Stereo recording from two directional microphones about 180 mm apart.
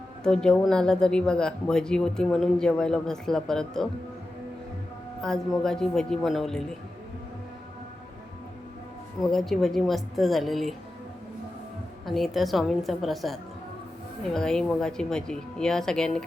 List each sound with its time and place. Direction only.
0.2 s speech: 5° left (ahead or behind)
5.6 s speech: 5° left (ahead or behind)
9.3 s speech: centre (ahead or behind)
12.0 s speech: centre (ahead or behind)